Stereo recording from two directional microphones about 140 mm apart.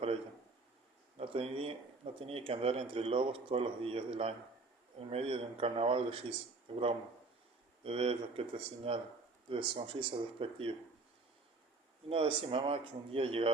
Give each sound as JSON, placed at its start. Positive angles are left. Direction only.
{"t": 1.2, "sound": "speech", "side_deg": -40}
{"t": 7.9, "sound": "speech", "side_deg": -45}
{"t": 12.0, "sound": "speech", "side_deg": -40}